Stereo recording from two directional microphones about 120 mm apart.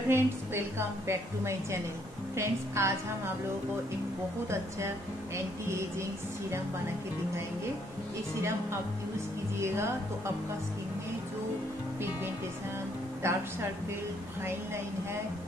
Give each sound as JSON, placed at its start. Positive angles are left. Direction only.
{"t": 0.1, "sound": "a woman's voice", "side_deg": -20}
{"t": 4.5, "sound": "a woman's voice", "side_deg": -25}
{"t": 9.6, "sound": "a woman's voice", "side_deg": -20}
{"t": 13.2, "sound": "a woman's voice", "side_deg": -20}